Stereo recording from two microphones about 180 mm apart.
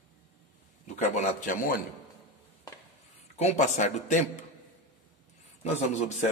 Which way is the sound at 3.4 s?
40° left (ahead or behind).